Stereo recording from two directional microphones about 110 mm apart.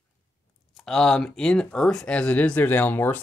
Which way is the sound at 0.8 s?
5° left (ahead or behind).